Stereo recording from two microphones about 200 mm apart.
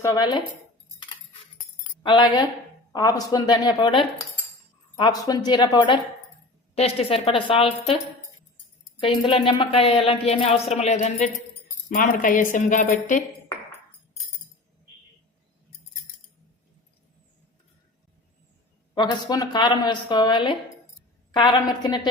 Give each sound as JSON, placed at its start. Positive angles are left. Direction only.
{"t": 0.0, "sound": "a woman's voice", "side_deg": 20}
{"t": 2.0, "sound": "a woman's voice", "side_deg": 25}
{"t": 9.0, "sound": "a woman's voice", "side_deg": 25}
{"t": 18.9, "sound": "a woman's voice", "side_deg": 20}